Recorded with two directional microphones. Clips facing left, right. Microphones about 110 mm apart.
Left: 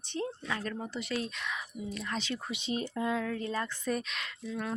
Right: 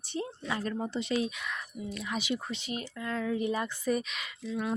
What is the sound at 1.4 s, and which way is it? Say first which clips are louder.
Speech: even; centre (ahead or behind).